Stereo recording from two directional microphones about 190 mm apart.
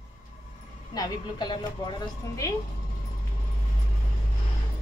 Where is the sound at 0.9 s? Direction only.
20° left (ahead or behind).